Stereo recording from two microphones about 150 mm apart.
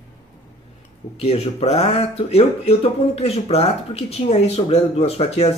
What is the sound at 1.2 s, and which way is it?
Speech, 45° left (ahead or behind).